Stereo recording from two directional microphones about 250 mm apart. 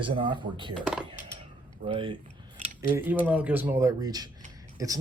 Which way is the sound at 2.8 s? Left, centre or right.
Centre.